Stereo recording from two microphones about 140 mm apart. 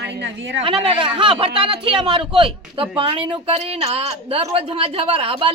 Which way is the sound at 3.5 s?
50° right (ahead or behind).